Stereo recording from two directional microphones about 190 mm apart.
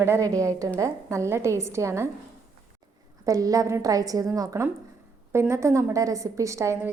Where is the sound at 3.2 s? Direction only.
20° right (ahead or behind).